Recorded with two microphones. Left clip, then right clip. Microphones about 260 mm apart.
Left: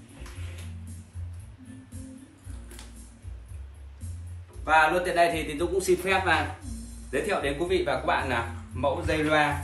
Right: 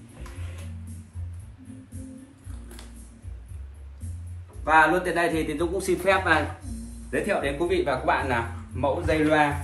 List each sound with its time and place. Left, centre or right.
4.7 s a man's voice: centre
5.5 s a man's voice: centre
6.6 s speech: centre